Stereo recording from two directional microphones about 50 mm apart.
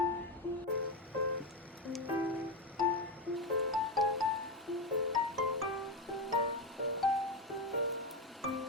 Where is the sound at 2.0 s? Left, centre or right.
Right.